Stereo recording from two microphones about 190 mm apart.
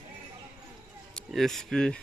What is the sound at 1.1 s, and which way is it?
Speech, centre (ahead or behind).